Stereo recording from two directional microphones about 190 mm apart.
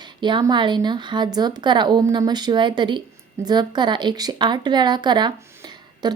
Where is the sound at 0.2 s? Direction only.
25° right (ahead or behind).